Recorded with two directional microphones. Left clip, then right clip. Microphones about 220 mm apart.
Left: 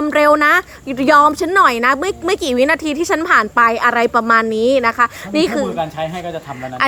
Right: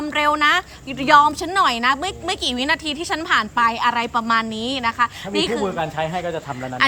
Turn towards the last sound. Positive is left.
turn(degrees=20)  # may be behind; listen again after turning